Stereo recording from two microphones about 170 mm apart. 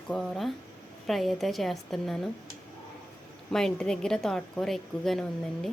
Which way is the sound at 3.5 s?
5° left (ahead or behind).